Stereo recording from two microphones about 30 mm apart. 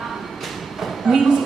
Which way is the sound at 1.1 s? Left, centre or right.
Right.